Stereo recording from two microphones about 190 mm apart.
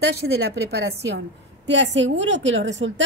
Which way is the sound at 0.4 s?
60° right (ahead or behind).